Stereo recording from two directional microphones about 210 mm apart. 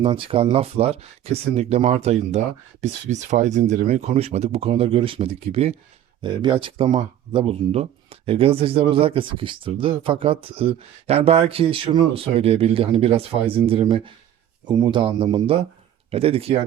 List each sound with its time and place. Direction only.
0.0 s speech: 25° right (ahead or behind)